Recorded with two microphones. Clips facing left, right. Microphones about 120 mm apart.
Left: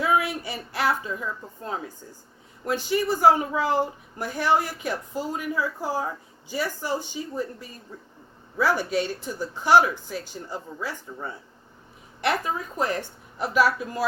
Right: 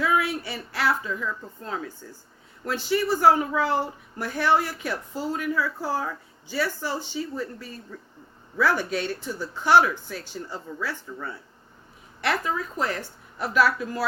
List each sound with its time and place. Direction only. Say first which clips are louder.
0.0 s speech: left 1 dB; 20° left (ahead or behind)
12.8 s a woman's voice: left 2 dB; 20° left (ahead or behind)